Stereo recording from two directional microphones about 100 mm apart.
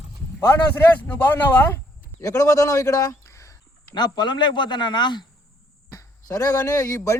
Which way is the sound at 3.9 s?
45° left (ahead or behind).